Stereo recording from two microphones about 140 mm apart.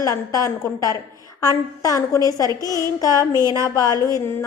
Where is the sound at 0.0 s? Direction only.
25° left (ahead or behind).